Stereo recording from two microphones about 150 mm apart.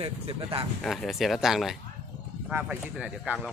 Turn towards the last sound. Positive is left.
turn(degrees=-5)  # may be behind; listen again after turning